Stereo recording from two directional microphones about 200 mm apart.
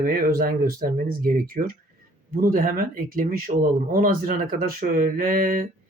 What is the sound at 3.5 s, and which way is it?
Speech, 35° right (ahead or behind).